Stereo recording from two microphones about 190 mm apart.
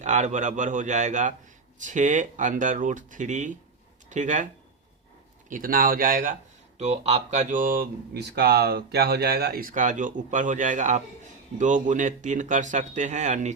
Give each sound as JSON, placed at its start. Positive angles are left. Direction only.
{"t": 0.0, "sound": "speech", "side_deg": -40}
{"t": 5.5, "sound": "speech", "side_deg": -45}
{"t": 6.7, "sound": "speech", "side_deg": -35}